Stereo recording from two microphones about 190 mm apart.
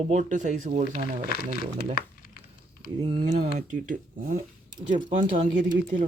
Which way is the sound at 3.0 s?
40° right (ahead or behind).